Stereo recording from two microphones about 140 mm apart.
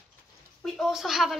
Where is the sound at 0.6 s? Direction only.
Centre (ahead or behind).